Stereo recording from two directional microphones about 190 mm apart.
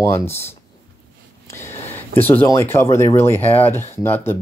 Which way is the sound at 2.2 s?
10° left (ahead or behind).